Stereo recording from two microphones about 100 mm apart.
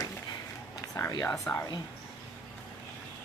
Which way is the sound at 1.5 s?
20° left (ahead or behind).